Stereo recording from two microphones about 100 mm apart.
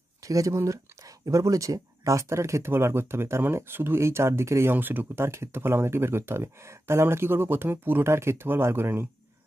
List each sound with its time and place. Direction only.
0.2 s speech: 35° right (ahead or behind)